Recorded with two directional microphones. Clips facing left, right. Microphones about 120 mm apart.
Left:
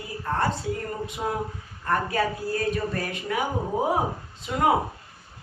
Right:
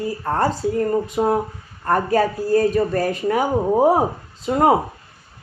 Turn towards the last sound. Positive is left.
turn(degrees=-40)  # may be behind; listen again after turning